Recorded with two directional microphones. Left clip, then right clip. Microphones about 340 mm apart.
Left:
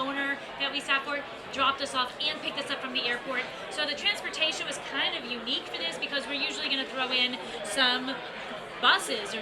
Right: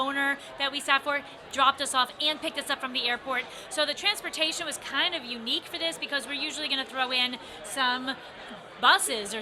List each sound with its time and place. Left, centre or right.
0.0 s a woman's voice: right